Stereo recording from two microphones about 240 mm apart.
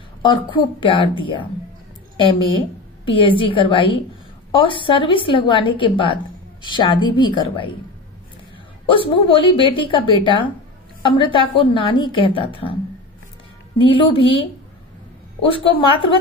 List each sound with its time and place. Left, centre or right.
0.2 s a woman's voice: centre
8.8 s a woman's voice: left
13.7 s a woman's voice: left
15.4 s a woman's voice: left